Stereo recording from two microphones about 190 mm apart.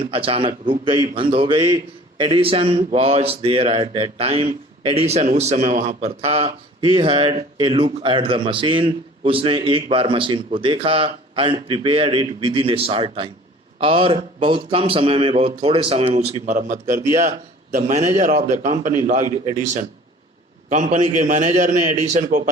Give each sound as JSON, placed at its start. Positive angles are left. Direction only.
{"t": 0.0, "sound": "a man's voice", "side_deg": -30}
{"t": 20.7, "sound": "a man's voice", "side_deg": -40}